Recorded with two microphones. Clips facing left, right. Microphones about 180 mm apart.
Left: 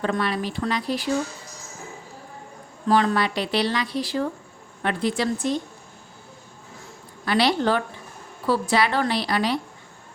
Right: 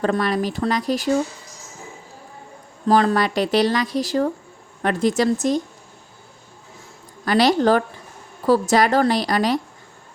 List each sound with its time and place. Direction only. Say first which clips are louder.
0.0 s a woman's voice: right 4 dB; 40° right (ahead or behind)
2.8 s a woman's voice: right 3 dB; 35° right (ahead or behind)
7.3 s a woman's voice: right 5 dB; 45° right (ahead or behind)